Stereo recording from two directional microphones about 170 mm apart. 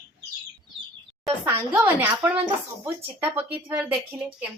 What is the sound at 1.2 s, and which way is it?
A woman's voice, 10° right (ahead or behind).